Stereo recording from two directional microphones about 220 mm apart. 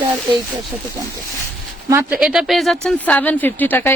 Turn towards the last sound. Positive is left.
turn(degrees=10)  # may be behind; listen again after turning